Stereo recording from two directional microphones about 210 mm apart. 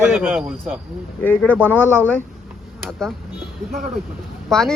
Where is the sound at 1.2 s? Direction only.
10° left (ahead or behind).